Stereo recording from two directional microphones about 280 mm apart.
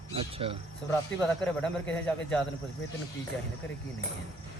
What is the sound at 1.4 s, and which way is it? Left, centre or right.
Speech, centre.